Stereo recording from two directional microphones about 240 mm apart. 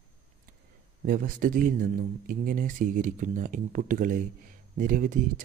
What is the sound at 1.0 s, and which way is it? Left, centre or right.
A man's voice, right.